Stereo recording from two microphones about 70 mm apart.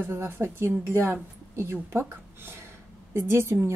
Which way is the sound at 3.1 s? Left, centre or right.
Right.